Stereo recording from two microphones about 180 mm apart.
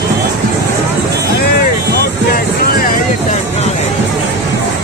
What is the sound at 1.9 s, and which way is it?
Music, 55° left (ahead or behind).